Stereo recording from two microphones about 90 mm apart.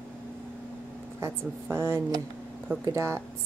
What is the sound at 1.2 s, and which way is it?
A woman's voice, 30° right (ahead or behind).